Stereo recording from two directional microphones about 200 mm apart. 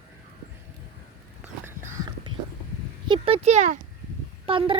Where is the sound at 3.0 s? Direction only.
25° right (ahead or behind).